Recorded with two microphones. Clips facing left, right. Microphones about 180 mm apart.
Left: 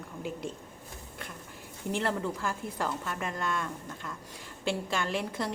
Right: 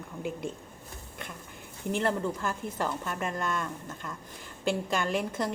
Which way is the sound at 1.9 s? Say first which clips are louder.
Right 2 dB; centre (ahead or behind).